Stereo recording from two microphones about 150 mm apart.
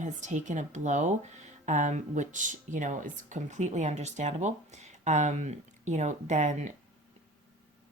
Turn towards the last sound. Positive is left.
turn(degrees=-50)  # may be behind; listen again after turning